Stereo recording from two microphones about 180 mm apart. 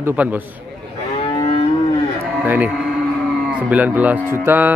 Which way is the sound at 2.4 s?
10° right (ahead or behind).